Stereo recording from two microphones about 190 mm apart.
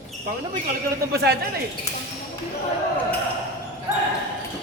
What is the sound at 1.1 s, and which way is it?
Speech, 55° right (ahead or behind).